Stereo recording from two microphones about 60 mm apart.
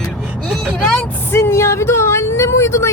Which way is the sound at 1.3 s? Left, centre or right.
Left.